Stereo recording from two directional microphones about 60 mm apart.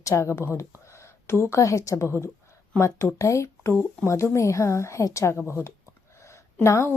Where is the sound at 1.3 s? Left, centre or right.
Left.